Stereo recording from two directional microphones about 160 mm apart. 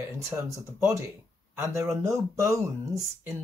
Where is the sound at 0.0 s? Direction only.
15° right (ahead or behind).